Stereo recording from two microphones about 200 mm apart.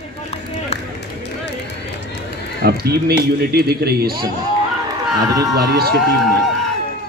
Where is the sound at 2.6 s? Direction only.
50° right (ahead or behind).